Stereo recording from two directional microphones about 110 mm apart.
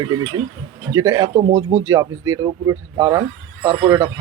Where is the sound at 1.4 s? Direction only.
90° right.